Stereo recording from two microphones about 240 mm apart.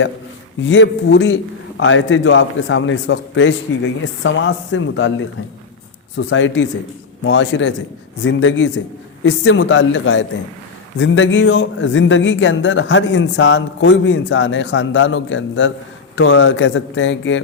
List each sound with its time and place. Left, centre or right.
0.6 s speech: left
6.1 s speech: left